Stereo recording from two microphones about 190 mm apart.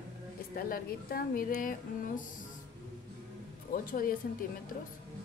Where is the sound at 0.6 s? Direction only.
50° left (ahead or behind).